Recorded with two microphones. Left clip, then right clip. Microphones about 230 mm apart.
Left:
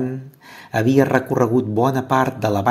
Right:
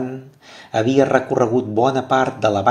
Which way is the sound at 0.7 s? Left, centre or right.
Left.